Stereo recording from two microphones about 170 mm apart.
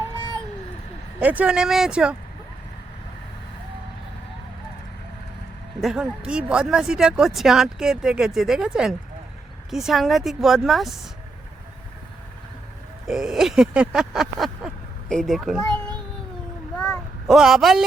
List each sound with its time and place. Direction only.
1.2 s speech: 10° right (ahead or behind)
5.8 s speech: 5° right (ahead or behind)
13.1 s speech: centre (ahead or behind)
16.7 s child singing: 5° left (ahead or behind)